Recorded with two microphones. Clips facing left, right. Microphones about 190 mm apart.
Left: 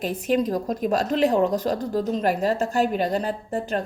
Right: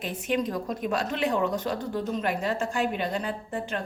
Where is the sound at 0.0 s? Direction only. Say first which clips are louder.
Left 5 dB; 40° left (ahead or behind).